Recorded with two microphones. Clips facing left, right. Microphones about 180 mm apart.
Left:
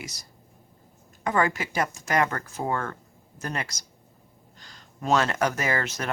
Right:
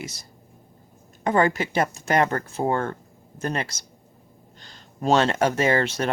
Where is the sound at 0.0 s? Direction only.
25° right (ahead or behind).